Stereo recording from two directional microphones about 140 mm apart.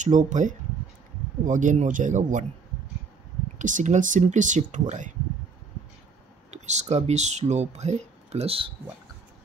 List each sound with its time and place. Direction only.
0.0 s speech: 60° right (ahead or behind)
3.5 s speech: 60° right (ahead or behind)
6.5 s speech: 55° right (ahead or behind)